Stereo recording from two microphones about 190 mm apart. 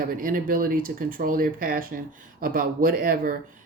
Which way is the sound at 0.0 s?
45° right (ahead or behind).